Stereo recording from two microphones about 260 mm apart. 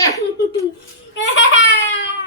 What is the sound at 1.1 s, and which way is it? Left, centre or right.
Speech, left.